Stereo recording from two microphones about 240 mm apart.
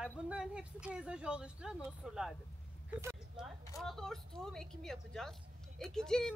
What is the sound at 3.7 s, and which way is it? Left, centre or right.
Speech, centre.